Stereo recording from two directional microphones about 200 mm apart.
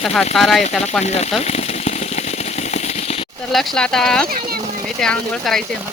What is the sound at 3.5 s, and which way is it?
Speech, centre (ahead or behind).